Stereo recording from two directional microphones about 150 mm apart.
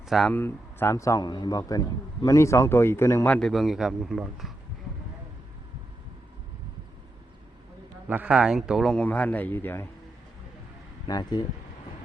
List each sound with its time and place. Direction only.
0.0 s speech: centre (ahead or behind)
0.3 s a man's voice: 15° left (ahead or behind); by 4.5 s centre (ahead or behind)
8.0 s a man's voice: 10° right (ahead or behind); by 9.8 s 15° left (ahead or behind)
11.0 s speech: 30° left (ahead or behind)